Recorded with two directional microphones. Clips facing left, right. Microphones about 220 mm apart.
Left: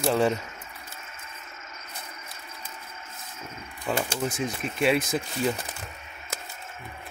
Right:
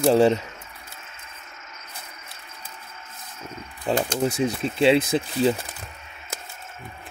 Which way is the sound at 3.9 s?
30° right (ahead or behind).